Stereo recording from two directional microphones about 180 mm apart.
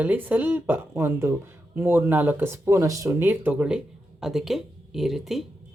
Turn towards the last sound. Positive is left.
turn(degrees=0)  # may be behind; listen again after turning